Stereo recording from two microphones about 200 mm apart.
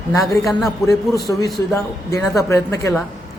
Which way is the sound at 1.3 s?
15° left (ahead or behind).